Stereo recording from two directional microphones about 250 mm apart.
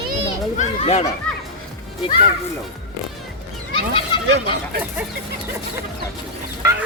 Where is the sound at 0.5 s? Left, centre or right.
Left.